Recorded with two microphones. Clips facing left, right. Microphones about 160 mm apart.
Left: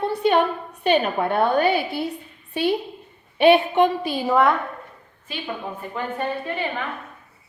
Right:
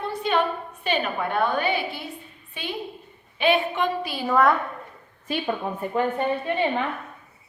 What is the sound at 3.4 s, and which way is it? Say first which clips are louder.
Speech: left 7 dB; 55° left (ahead or behind).